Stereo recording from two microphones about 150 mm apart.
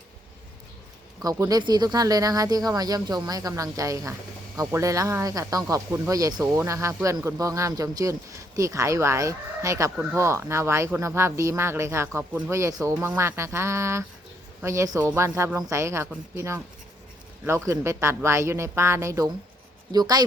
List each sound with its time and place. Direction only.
1.2 s speech: 25° right (ahead or behind)